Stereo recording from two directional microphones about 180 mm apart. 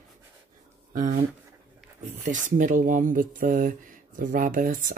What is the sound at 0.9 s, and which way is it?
Speech, 50° right (ahead or behind).